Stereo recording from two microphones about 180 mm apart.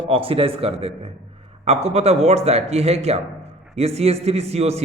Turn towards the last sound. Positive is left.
turn(degrees=-35)  # may be behind; listen again after turning